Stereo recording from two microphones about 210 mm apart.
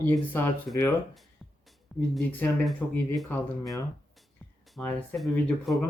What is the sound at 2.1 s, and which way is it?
Speech, 5° left (ahead or behind).